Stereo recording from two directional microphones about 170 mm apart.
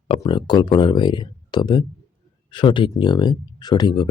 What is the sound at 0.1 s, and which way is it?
Speech, 30° left (ahead or behind).